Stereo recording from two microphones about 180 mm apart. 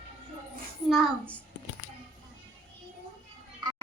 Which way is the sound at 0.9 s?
5° left (ahead or behind).